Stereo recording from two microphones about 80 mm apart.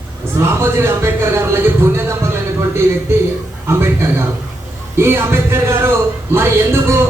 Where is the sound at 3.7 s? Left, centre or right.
Right.